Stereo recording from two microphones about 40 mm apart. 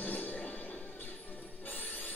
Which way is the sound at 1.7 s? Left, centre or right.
Left.